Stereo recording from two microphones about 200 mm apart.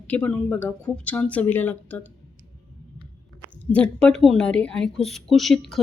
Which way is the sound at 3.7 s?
5° left (ahead or behind).